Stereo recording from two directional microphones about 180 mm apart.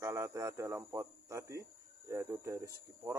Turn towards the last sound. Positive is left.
turn(degrees=-15)  # may be behind; listen again after turning